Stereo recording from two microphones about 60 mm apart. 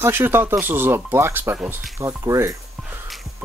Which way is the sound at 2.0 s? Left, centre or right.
Right.